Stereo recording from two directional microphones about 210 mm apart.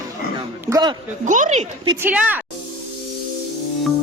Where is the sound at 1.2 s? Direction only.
35° right (ahead or behind).